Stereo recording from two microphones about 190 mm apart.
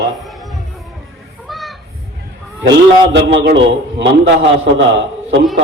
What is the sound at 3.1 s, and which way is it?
Speech, 60° right (ahead or behind).